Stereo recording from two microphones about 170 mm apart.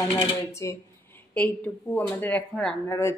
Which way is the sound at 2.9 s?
15° left (ahead or behind).